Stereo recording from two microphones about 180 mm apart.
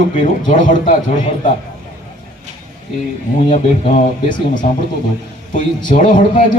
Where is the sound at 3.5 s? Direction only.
45° left (ahead or behind).